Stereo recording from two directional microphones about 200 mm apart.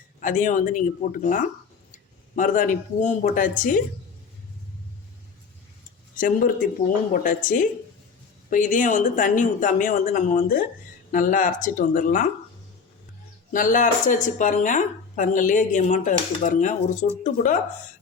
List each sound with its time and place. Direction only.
0.2 s speech: 40° left (ahead or behind)
6.1 s speech: 40° left (ahead or behind)
13.5 s speech: 40° left (ahead or behind)